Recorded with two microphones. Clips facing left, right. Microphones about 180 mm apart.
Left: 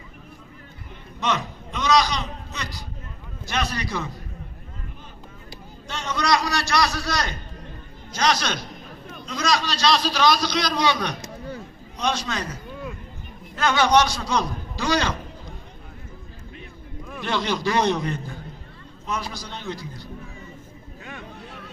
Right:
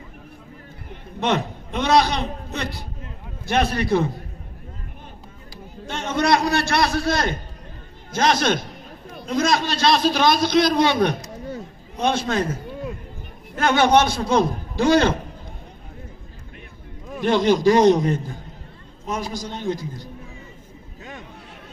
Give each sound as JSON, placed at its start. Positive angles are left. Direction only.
{"t": 1.2, "sound": "a man's voice", "side_deg": -55}
{"t": 5.9, "sound": "a man's voice", "side_deg": -55}
{"t": 17.1, "sound": "a man's voice", "side_deg": -50}